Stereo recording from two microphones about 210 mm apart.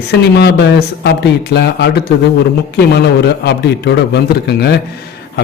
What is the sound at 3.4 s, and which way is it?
A man's voice, 55° left (ahead or behind).